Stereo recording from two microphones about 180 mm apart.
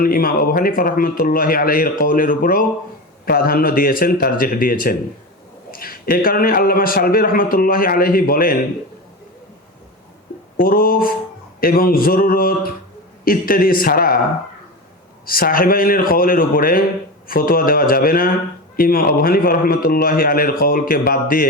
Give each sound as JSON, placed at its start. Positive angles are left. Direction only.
{"t": 0.0, "sound": "a man's voice", "side_deg": 55}
{"t": 10.6, "sound": "a man's voice", "side_deg": 55}
{"t": 15.3, "sound": "a man's voice", "side_deg": 55}